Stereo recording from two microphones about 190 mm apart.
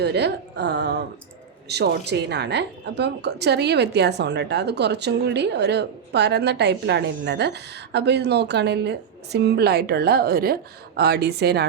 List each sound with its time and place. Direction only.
0.0 s a woman's voice: 60° right (ahead or behind)